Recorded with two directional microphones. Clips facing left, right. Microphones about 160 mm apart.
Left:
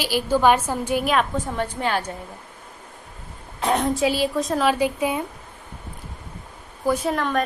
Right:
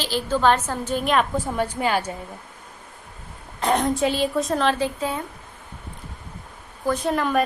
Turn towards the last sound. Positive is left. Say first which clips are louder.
# right 1 dB
turn(degrees=-5)  # may be behind; listen again after turning